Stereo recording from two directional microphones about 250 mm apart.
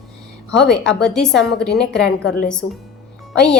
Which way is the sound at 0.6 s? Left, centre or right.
Centre.